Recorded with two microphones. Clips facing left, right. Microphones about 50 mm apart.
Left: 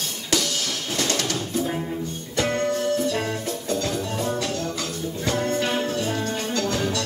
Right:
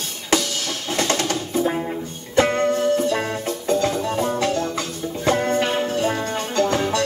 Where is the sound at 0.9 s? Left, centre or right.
Right.